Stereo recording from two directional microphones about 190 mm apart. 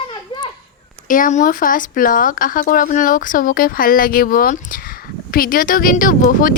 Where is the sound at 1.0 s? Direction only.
45° left (ahead or behind).